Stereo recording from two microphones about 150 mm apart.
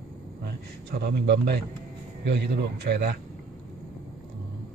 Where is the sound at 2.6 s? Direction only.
90° right.